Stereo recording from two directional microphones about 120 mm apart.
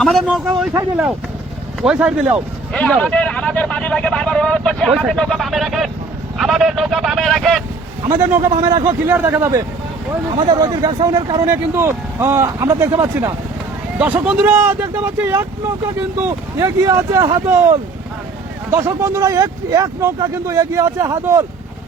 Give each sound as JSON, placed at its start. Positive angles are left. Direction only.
{"t": 1.8, "sound": "speech", "side_deg": -5}
{"t": 2.7, "sound": "speech", "side_deg": 10}
{"t": 8.2, "sound": "speech", "side_deg": -20}
{"t": 10.3, "sound": "speech", "side_deg": -35}
{"t": 11.4, "sound": "speech", "side_deg": -20}
{"t": 14.0, "sound": "speech", "side_deg": -10}
{"t": 17.4, "sound": "speech", "side_deg": -15}